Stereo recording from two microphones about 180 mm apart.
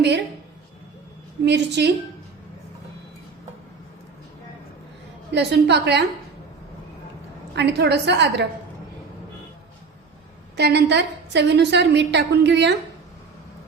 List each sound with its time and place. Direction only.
1.5 s a woman's voice: 70° right (ahead or behind)
5.3 s a woman's voice: 70° right (ahead or behind)
7.5 s a woman's voice: 70° right (ahead or behind)
10.6 s a woman's voice: 70° right (ahead or behind)